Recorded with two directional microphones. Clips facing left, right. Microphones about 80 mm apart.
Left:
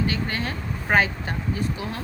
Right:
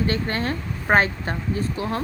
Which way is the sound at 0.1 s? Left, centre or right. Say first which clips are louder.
Right 3 dB; right.